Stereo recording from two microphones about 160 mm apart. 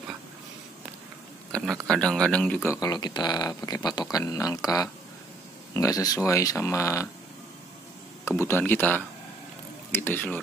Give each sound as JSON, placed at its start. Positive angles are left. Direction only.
{"t": 1.5, "sound": "speech", "side_deg": 5}
{"t": 8.4, "sound": "speech", "side_deg": 15}